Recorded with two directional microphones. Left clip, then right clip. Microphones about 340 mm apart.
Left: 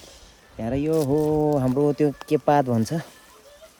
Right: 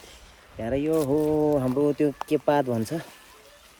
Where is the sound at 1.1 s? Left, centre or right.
Left.